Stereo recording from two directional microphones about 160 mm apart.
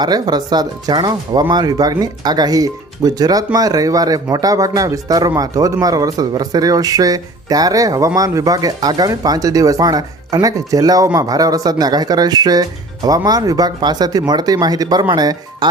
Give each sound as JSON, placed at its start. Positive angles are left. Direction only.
{"t": 0.0, "sound": "speech", "side_deg": -25}